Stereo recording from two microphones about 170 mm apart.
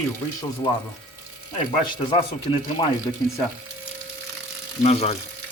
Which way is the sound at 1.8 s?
30° left (ahead or behind).